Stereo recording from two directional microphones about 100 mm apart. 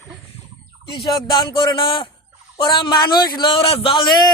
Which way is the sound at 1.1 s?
55° left (ahead or behind).